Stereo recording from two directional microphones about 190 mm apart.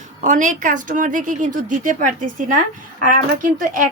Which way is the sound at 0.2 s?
40° right (ahead or behind).